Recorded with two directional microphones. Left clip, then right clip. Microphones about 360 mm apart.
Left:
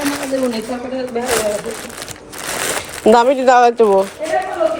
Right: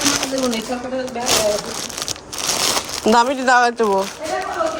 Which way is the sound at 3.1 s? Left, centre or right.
Centre.